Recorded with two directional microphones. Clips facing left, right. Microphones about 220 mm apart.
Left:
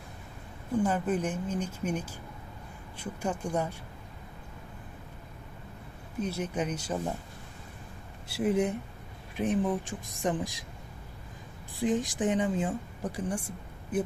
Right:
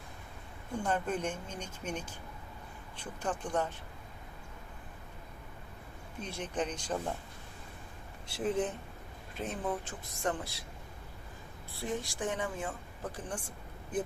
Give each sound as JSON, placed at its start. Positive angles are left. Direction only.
{"t": 0.8, "sound": "speech", "side_deg": 5}
{"t": 6.2, "sound": "speech", "side_deg": 10}
{"t": 8.3, "sound": "speech", "side_deg": 10}
{"t": 11.7, "sound": "speech", "side_deg": 15}